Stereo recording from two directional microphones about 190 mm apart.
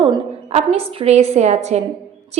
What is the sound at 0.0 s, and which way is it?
A woman's voice, 30° right (ahead or behind).